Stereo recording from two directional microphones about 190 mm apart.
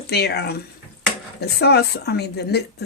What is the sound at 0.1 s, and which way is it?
Speech, 60° left (ahead or behind).